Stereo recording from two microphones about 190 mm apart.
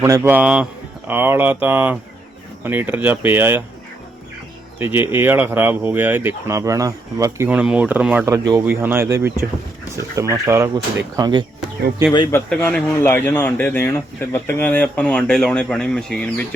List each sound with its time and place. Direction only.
0.0 s speech: 10° right (ahead or behind)
4.8 s speech: 10° right (ahead or behind)
12.3 s speech: 10° left (ahead or behind)